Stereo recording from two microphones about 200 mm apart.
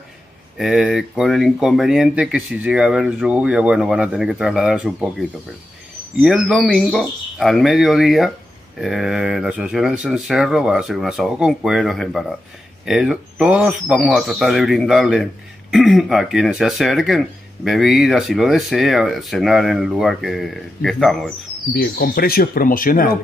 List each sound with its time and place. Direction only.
0.6 s speech: 5° right (ahead or behind)
6.2 s speech: centre (ahead or behind)
21.7 s speech: 50° left (ahead or behind)